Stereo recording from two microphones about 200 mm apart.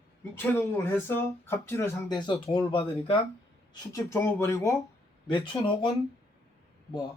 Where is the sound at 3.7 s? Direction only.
15° left (ahead or behind).